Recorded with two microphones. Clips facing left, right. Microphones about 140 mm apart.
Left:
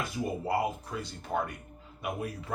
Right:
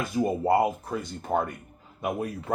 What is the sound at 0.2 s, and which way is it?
Speech, 45° right (ahead or behind).